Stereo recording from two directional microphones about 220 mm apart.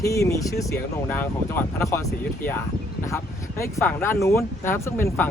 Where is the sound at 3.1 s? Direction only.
15° left (ahead or behind).